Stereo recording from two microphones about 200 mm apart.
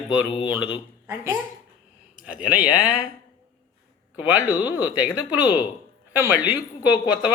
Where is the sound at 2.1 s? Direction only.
5° right (ahead or behind).